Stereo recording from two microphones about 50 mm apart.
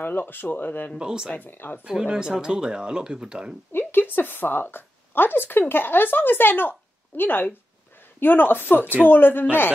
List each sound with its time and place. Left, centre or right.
0.0 s speech: left
0.9 s speech: centre
1.3 s a man's voice: left
1.9 s speech: centre
3.7 s a woman's voice: left